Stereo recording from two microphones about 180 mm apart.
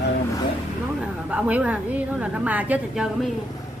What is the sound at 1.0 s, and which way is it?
A woman's voice, 5° right (ahead or behind).